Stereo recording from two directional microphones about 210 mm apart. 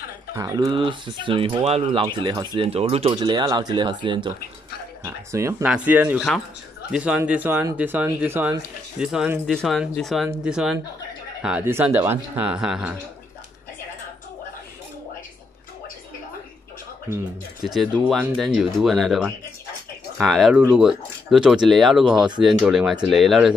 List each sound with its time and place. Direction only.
0.3 s speech: 15° right (ahead or behind)
17.6 s speech: centre (ahead or behind)